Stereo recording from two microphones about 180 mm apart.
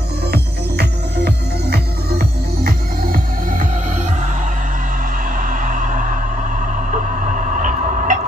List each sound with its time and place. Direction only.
0.3 s music: 65° right (ahead or behind)
5.5 s music: 45° right (ahead or behind)